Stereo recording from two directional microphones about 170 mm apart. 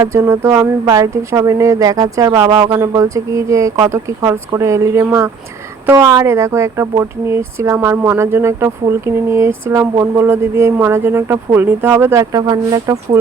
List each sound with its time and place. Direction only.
0.1 s speech: 15° right (ahead or behind)